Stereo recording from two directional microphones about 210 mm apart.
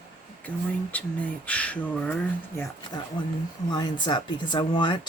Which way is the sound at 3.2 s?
20° left (ahead or behind).